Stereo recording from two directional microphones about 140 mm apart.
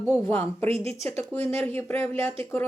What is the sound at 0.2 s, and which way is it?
Speech, 20° left (ahead or behind).